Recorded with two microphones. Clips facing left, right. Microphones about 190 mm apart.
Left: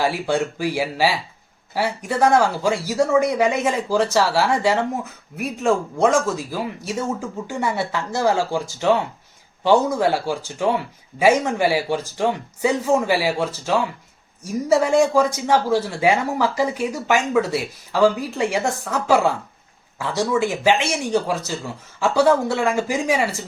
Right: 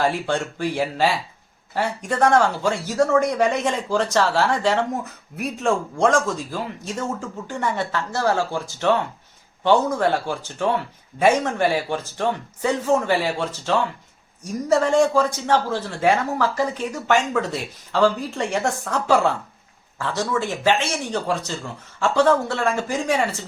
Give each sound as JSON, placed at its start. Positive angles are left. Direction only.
{"t": 0.0, "sound": "speech", "side_deg": 10}